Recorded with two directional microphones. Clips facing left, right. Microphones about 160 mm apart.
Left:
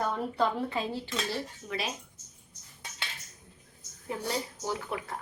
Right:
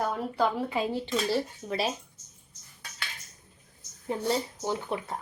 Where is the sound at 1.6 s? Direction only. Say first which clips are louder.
Right 5 dB; 35° right (ahead or behind).